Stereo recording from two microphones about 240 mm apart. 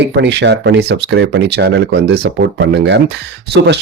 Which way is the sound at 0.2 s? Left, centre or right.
Right.